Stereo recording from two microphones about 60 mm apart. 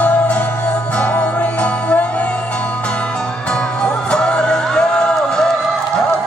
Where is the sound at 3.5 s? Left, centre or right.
Centre.